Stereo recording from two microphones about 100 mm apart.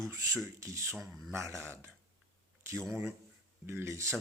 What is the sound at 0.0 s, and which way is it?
Speech, 30° right (ahead or behind).